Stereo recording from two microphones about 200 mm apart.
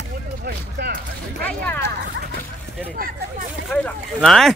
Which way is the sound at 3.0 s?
45° right (ahead or behind).